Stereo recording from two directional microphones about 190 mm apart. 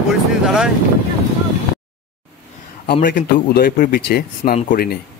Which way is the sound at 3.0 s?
50° left (ahead or behind).